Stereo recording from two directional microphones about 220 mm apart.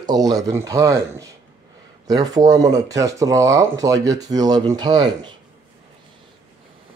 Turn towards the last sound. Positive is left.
turn(degrees=-20)  # may be behind; listen again after turning